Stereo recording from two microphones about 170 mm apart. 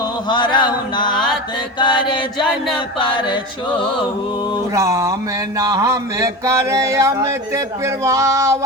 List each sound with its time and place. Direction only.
0.3 s chant: 25° left (ahead or behind)
1.8 s music: 25° left (ahead or behind)
4.7 s a sound: 20° right (ahead or behind)